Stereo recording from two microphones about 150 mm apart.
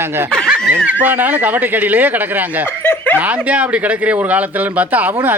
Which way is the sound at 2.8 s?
10° left (ahead or behind).